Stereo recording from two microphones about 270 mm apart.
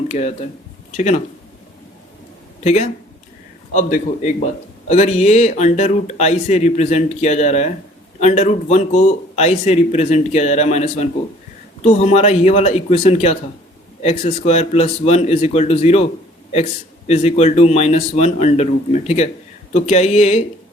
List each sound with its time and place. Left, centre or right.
0.1 s speech: left
2.6 s speech: left
17.1 s speech: left